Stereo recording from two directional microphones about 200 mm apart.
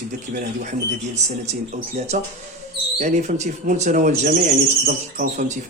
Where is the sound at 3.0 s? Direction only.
40° right (ahead or behind).